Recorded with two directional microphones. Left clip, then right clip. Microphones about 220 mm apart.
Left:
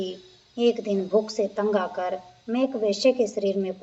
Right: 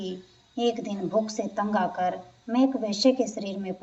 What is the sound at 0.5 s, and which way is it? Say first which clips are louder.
A woman's voice: left 5 dB; 40° left (ahead or behind).